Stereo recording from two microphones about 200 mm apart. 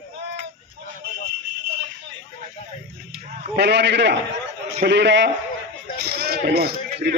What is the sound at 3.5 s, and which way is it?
A man's voice, 55° right (ahead or behind).